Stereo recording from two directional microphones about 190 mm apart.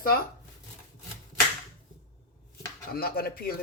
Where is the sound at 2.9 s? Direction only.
55° left (ahead or behind).